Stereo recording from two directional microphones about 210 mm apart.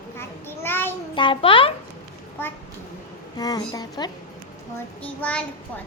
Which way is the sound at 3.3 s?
20° left (ahead or behind).